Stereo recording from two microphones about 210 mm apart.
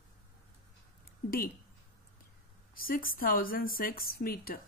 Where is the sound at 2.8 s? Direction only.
45° left (ahead or behind).